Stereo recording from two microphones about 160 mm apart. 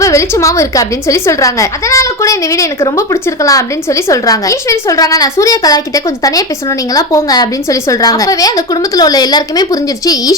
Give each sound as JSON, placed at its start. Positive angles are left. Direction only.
{"t": 0.0, "sound": "a woman's voice", "side_deg": 20}